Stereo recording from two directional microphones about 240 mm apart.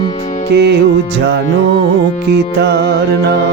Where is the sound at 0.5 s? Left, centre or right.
Right.